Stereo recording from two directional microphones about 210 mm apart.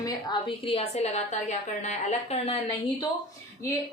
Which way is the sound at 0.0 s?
20° left (ahead or behind).